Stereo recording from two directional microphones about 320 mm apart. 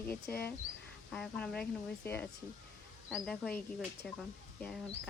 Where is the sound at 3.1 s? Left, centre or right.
Centre.